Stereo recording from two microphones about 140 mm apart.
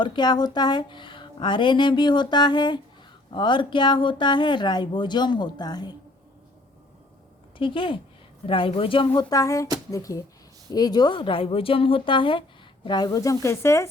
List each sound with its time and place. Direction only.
0.0 s a woman's voice: 35° left (ahead or behind)
7.6 s a woman's voice: 40° left (ahead or behind)
9.3 s a woman's voice: 25° left (ahead or behind)